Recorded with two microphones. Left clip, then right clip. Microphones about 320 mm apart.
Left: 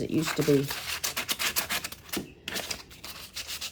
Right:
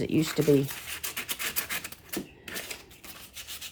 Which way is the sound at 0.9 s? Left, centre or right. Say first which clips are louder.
Left 4 dB; centre.